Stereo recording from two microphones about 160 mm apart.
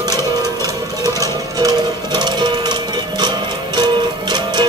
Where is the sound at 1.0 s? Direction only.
20° right (ahead or behind).